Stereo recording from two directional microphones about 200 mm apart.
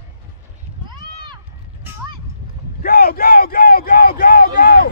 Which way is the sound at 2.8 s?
50° left (ahead or behind).